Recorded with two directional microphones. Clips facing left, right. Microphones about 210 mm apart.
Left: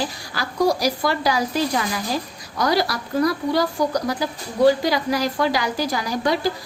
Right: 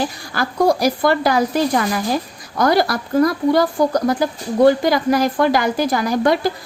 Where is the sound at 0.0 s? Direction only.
50° right (ahead or behind).